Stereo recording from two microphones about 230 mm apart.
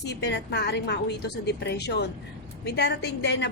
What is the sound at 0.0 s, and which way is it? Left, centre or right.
A woman's voice, left.